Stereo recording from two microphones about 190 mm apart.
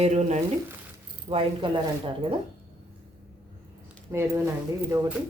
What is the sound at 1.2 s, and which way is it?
Speech, 25° right (ahead or behind).